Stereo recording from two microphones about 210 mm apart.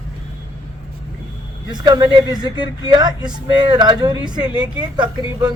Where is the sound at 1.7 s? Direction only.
20° right (ahead or behind).